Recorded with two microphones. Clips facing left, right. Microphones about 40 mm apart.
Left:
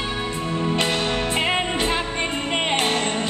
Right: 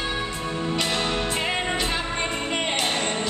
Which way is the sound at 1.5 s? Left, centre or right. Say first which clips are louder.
Left 3 dB; left.